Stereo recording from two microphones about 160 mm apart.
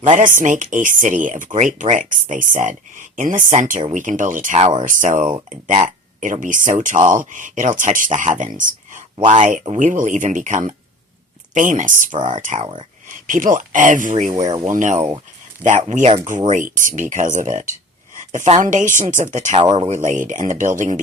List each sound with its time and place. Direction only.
0.0 s speech: 50° right (ahead or behind)